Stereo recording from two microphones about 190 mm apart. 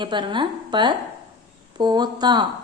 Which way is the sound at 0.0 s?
25° right (ahead or behind).